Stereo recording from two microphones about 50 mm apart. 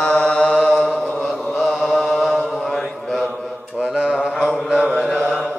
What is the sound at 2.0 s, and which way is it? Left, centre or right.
Mantra, centre.